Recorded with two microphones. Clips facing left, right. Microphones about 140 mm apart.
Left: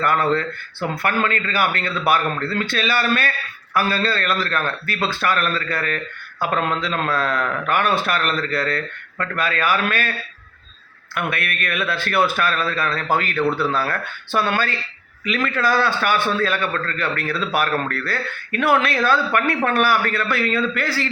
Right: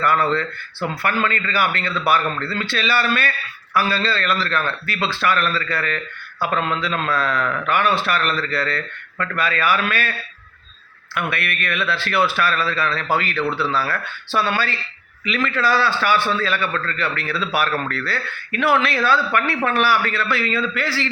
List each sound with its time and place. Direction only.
0.0 s a man's voice: 50° left (ahead or behind)
11.1 s a man's voice: 45° left (ahead or behind)